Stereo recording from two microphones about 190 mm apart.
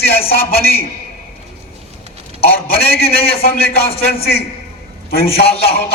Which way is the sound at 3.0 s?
30° left (ahead or behind).